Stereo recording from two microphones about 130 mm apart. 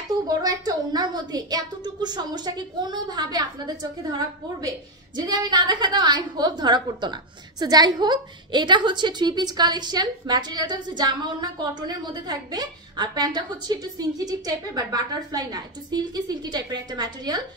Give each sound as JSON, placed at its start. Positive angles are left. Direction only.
{"t": 0.3, "sound": "a woman's voice", "side_deg": -30}